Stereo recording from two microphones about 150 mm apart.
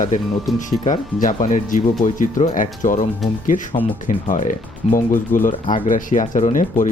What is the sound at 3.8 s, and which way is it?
Speech, 10° right (ahead or behind).